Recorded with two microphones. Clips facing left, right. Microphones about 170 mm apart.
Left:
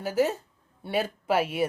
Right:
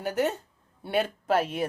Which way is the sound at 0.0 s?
Centre (ahead or behind).